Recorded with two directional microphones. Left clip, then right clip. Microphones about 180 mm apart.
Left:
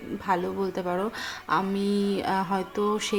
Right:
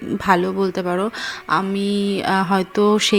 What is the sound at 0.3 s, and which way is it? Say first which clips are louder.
Speech: right 9 dB; 30° right (ahead or behind).